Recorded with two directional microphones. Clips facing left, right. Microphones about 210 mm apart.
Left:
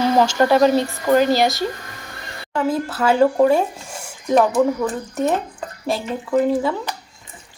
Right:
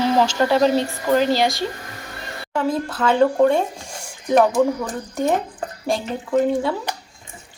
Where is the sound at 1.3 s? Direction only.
45° left (ahead or behind).